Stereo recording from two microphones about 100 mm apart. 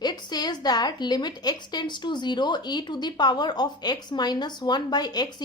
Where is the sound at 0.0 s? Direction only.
45° left (ahead or behind).